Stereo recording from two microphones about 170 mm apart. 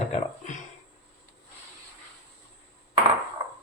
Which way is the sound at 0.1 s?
45° left (ahead or behind).